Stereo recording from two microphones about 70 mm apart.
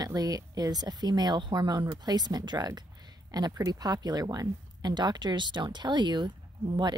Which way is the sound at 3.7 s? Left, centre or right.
Right.